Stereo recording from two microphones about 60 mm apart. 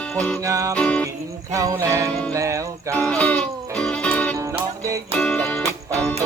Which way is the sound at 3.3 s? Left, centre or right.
Centre.